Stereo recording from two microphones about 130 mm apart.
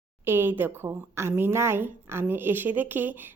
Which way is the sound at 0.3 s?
15° right (ahead or behind).